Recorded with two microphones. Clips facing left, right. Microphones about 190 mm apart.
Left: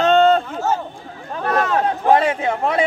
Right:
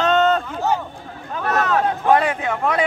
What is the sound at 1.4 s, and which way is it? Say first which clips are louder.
Speech: left 1 dB; 30° left (ahead or behind).